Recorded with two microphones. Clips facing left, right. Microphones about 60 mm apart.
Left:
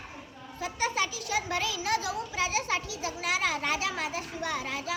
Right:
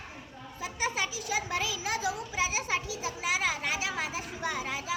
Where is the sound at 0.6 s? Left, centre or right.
Centre.